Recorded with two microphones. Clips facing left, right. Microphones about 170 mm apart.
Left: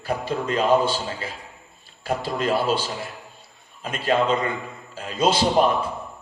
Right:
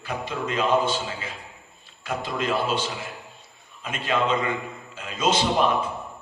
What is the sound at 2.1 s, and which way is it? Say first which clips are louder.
Speech: left 3 dB; 35° left (ahead or behind).